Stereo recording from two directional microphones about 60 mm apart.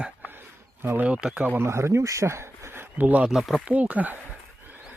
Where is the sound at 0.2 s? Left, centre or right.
Right.